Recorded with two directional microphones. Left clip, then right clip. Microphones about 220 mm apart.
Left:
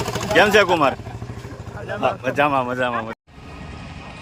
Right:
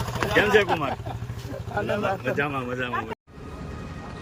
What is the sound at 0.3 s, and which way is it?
Speech, 20° left (ahead or behind).